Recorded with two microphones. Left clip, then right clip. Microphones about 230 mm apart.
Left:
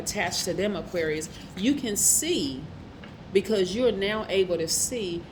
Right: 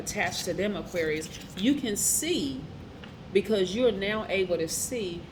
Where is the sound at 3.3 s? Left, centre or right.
Left.